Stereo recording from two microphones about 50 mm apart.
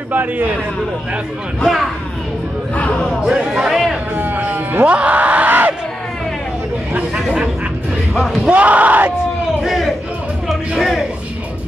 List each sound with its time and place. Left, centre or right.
0.1 s a man's voice: right
1.6 s speech: centre
2.7 s a sound: left
3.3 s a sound: centre
4.1 s a sound: right
7.0 s chatter: centre
8.1 s speech: centre
8.5 s speech: right
9.1 s crowd: centre
9.7 s speech: centre